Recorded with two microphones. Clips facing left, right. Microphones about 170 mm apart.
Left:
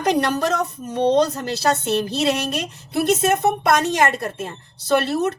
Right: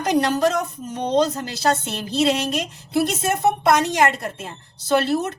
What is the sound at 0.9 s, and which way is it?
Speech, 55° left (ahead or behind).